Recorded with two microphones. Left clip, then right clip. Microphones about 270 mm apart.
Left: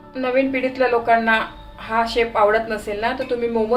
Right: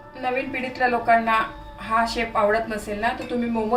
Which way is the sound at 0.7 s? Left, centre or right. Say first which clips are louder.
Left 1 dB; left.